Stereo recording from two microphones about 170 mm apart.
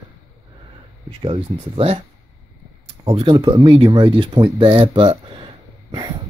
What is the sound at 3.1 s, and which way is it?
Speech, 30° right (ahead or behind).